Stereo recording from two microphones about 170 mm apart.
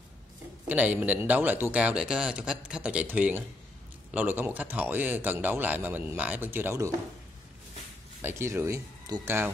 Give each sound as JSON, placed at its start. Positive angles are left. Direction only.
{"t": 0.7, "sound": "speech", "side_deg": -10}
{"t": 8.2, "sound": "speech", "side_deg": -15}